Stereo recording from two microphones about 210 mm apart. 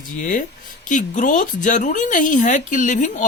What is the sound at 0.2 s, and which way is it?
Speech, 40° left (ahead or behind).